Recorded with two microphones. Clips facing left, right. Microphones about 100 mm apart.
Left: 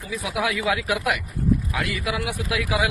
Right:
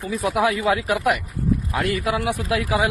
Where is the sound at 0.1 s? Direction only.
45° right (ahead or behind).